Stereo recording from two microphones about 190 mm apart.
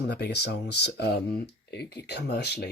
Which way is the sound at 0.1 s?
60° left (ahead or behind).